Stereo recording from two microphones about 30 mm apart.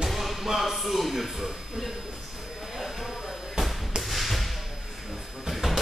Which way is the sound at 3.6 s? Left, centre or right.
Right.